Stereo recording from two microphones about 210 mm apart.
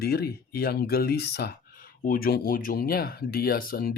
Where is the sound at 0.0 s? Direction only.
50° left (ahead or behind).